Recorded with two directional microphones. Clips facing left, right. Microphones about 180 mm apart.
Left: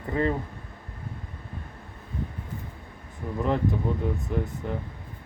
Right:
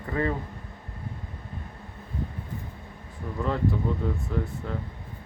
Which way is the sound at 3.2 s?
20° left (ahead or behind).